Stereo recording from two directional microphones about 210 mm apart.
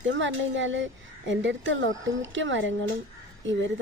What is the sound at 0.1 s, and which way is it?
Speech, 60° right (ahead or behind).